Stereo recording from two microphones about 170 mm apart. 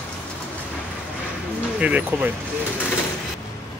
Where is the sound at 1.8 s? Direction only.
5° right (ahead or behind).